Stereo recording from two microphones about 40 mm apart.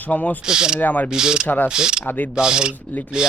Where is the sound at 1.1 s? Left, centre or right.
Centre.